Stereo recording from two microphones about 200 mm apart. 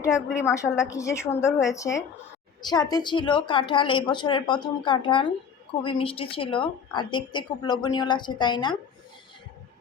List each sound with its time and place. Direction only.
0.4 s a woman's voice: 15° left (ahead or behind)